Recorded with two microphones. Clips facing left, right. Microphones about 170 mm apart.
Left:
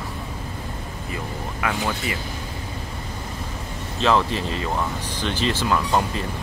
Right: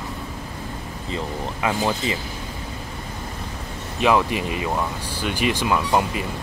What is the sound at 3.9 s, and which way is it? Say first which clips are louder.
Speech: right 1 dB; 15° right (ahead or behind).